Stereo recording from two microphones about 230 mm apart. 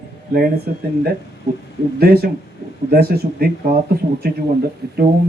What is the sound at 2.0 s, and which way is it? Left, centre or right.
Speech, right.